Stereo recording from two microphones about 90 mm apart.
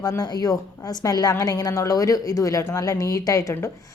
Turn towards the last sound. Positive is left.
turn(degrees=35)  # may be behind; listen again after turning